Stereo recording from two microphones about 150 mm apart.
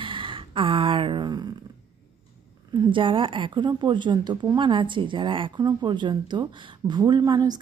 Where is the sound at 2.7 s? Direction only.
30° right (ahead or behind).